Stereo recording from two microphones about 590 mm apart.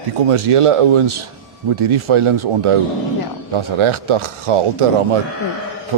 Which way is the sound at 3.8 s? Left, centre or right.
Right.